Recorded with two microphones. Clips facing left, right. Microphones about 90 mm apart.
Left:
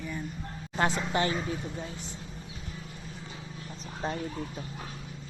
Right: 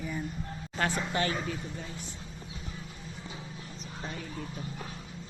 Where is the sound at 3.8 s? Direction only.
35° left (ahead or behind).